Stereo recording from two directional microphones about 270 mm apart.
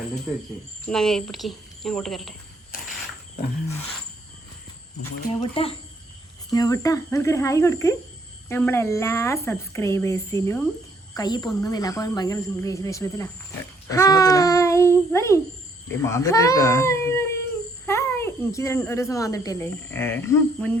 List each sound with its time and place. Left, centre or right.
0.9 s speech: centre
5.3 s a woman's voice: left